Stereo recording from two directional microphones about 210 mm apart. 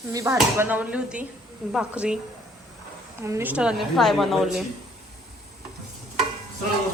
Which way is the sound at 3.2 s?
10° right (ahead or behind).